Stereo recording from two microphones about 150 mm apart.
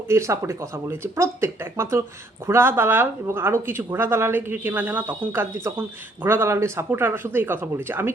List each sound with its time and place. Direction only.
0.1 s speech: 20° right (ahead or behind)